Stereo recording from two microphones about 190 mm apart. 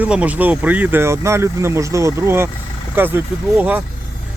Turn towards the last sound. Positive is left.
turn(degrees=-10)  # may be behind; listen again after turning